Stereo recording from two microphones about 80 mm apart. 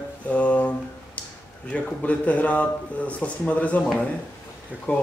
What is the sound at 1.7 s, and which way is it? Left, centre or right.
Speech, centre.